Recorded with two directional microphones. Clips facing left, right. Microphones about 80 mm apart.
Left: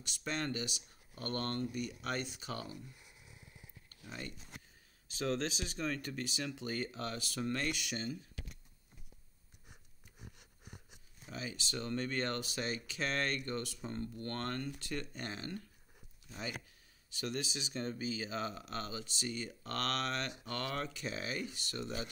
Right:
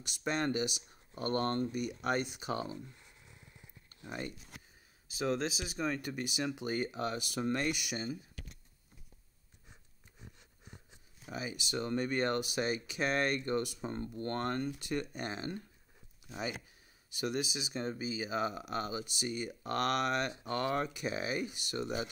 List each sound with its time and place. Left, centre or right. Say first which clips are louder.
0.0 s speech: right 5 dB; centre
3.9 s speech: right 5 dB; right
5.1 s speech: right 2 dB; centre
11.3 s speech: right 4 dB; centre